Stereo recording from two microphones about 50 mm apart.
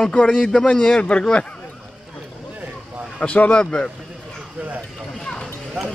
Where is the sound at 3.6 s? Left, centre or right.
Centre.